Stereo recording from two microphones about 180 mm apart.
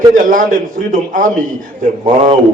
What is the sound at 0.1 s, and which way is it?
A man's voice, 50° right (ahead or behind).